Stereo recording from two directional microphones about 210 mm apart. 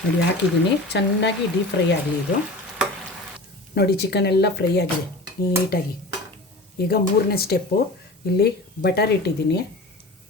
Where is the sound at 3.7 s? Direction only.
50° left (ahead or behind).